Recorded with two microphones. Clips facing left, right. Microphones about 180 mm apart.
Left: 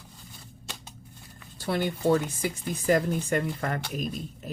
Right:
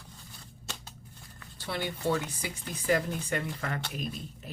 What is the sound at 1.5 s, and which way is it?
Speech, 45° left (ahead or behind).